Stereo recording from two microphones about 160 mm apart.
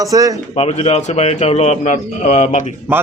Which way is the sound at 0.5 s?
40° left (ahead or behind).